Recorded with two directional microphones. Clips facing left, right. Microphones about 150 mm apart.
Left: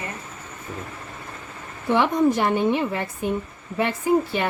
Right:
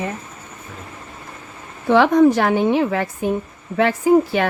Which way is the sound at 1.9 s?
85° right.